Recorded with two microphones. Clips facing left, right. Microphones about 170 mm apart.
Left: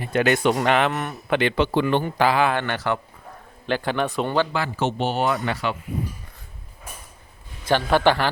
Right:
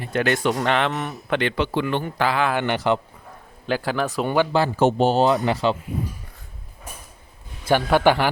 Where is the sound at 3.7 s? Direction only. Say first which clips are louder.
Even; 5° right (ahead or behind).